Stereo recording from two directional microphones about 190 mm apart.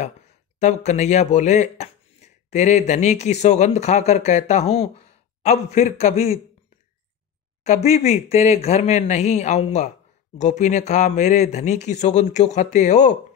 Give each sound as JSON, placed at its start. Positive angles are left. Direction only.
{"t": 0.6, "sound": "speech", "side_deg": 40}
{"t": 7.6, "sound": "speech", "side_deg": 35}